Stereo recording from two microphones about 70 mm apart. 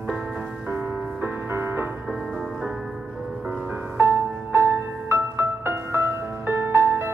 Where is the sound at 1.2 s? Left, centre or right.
Right.